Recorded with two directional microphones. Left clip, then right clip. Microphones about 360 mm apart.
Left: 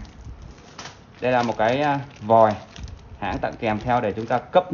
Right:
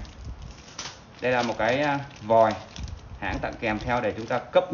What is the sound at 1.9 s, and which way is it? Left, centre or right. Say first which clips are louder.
Speech: left 4 dB; centre.